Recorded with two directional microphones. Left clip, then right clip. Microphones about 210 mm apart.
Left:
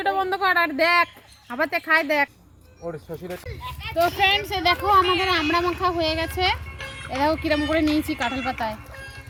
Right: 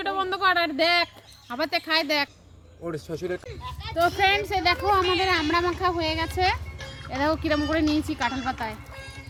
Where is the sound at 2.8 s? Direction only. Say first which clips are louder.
Even; 45° right (ahead or behind).